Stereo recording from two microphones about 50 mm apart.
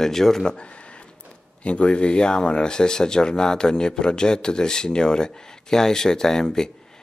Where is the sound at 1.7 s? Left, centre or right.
Left.